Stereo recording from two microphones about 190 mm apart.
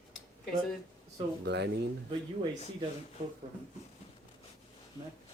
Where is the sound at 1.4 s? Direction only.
65° right (ahead or behind).